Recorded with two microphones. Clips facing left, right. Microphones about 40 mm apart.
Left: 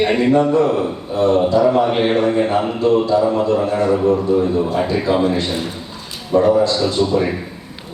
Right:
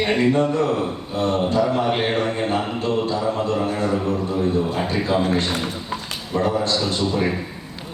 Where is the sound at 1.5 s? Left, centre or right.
Left.